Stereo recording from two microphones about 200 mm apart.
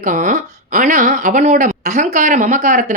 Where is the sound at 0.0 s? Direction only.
40° right (ahead or behind).